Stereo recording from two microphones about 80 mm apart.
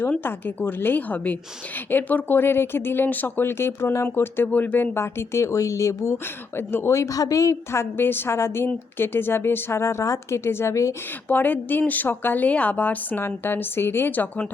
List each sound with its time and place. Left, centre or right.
0.2 s speech: left
6.6 s a woman's voice: left
11.3 s speech: left